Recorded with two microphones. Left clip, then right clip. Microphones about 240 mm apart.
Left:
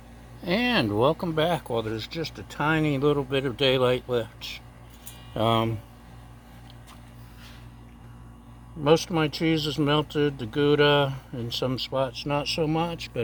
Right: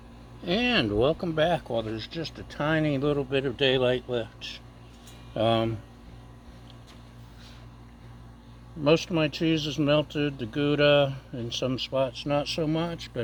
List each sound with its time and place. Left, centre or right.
0.4 s speech: left
8.8 s speech: left